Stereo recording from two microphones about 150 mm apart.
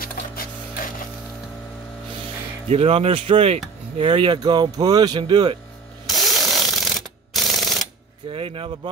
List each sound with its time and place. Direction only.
0.0 s printer: 70° left (ahead or behind)
2.7 s speech: 45° right (ahead or behind)
6.0 s ratchet: centre (ahead or behind)
8.3 s speech: 35° right (ahead or behind)